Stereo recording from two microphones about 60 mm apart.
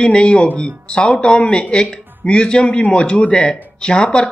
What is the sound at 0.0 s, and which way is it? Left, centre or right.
Speech, centre.